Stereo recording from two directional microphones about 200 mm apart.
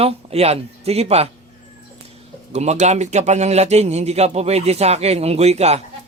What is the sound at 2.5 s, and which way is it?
Speech, 35° right (ahead or behind).